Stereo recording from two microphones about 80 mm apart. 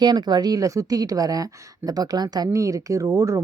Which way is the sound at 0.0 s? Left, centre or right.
Right.